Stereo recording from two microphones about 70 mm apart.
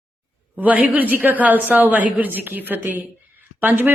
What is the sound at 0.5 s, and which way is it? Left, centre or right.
A woman's voice, right.